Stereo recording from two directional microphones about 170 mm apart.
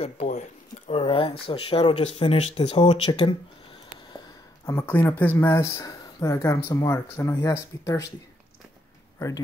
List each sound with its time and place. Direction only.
0.0 s speech: 45° left (ahead or behind)
4.6 s speech: 15° left (ahead or behind)